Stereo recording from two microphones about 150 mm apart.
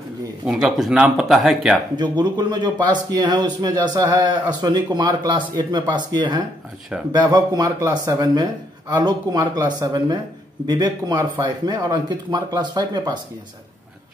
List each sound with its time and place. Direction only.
0.5 s speech: 5° right (ahead or behind)
2.0 s speech: 30° right (ahead or behind)